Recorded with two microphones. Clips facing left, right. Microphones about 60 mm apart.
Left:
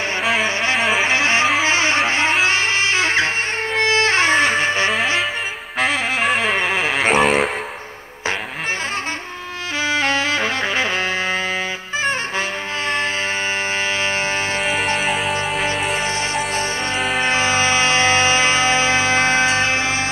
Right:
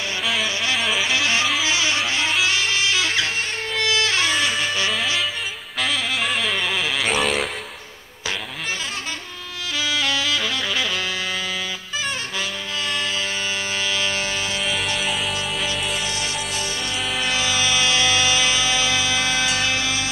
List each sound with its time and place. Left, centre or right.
0.2 s music: left
1.0 s music: left
5.8 s music: left
9.8 s saxophone: left
13.9 s music: left
14.6 s music: left
17.2 s music: left